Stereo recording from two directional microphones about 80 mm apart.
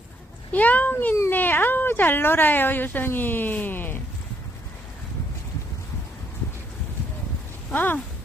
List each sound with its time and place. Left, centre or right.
0.5 s speech: centre
7.7 s speech: left